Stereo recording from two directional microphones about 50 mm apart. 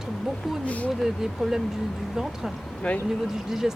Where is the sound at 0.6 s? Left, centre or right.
Left.